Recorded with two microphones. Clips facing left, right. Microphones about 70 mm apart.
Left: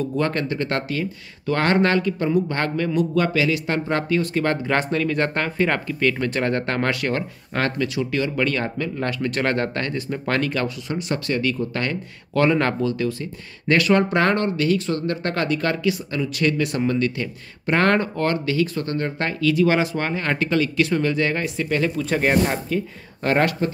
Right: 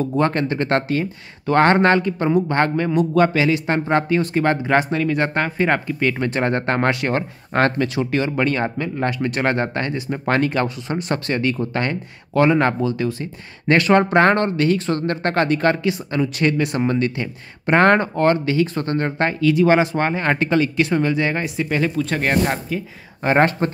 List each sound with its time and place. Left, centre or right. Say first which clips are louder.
0.0 s speech: right 4 dB; right
11.0 s speech: right 2 dB; right
12.4 s speech: right 3 dB; centre
23.2 s speech: right 3 dB; right